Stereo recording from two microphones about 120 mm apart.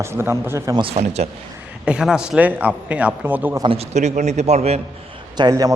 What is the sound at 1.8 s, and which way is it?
A man's voice, 10° right (ahead or behind).